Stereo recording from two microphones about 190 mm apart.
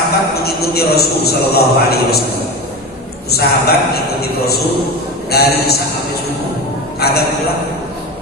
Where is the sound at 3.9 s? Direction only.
55° left (ahead or behind).